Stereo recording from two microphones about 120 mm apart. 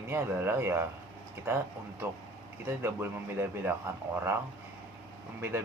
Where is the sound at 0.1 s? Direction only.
20° right (ahead or behind).